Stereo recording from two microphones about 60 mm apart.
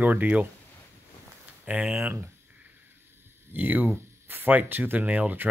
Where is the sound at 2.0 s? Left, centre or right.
Right.